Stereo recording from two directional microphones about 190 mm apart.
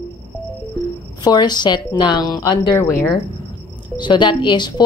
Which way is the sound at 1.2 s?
20° left (ahead or behind).